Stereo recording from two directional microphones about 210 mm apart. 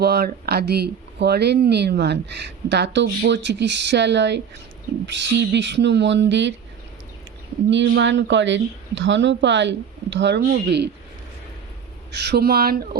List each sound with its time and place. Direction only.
0.0 s a woman's voice: 50° right (ahead or behind)
7.7 s a woman's voice: 60° right (ahead or behind)
12.1 s speech: 50° right (ahead or behind)